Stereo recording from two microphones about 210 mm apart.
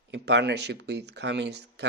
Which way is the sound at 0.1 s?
55° right (ahead or behind).